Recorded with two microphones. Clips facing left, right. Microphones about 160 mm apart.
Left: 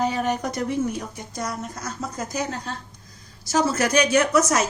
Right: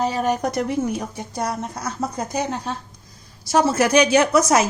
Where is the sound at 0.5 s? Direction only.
70° right (ahead or behind).